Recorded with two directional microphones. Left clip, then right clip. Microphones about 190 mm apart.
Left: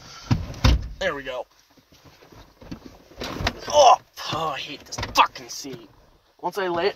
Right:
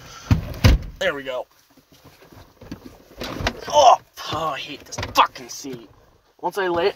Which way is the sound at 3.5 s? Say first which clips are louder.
Right 1 dB; 20° right (ahead or behind).